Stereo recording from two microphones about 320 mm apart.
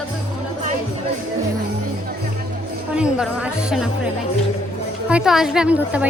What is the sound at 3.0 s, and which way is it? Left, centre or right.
A woman's voice, centre.